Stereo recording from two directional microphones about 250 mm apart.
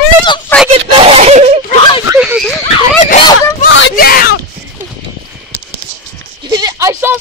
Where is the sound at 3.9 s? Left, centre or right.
Left.